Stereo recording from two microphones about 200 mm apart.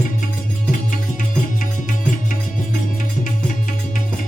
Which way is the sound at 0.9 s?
40° left (ahead or behind).